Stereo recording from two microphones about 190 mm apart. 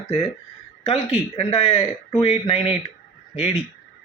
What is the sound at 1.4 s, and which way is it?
Speech, 35° left (ahead or behind).